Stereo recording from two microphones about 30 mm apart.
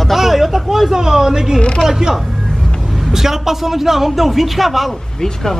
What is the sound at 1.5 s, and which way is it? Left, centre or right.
Speech, left.